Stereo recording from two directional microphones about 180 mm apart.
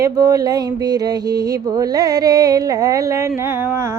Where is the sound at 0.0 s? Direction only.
20° right (ahead or behind).